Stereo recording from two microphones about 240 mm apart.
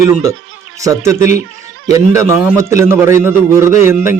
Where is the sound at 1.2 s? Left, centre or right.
Left.